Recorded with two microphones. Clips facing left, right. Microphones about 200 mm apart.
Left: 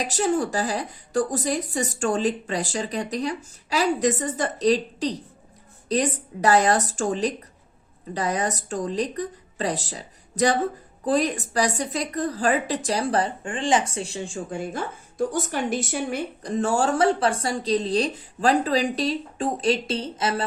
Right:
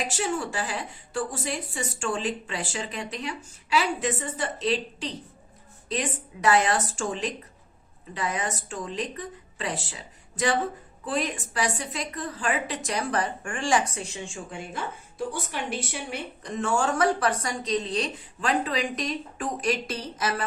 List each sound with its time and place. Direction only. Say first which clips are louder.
0.0 s a woman's voice: left 6 dB; 40° left (ahead or behind)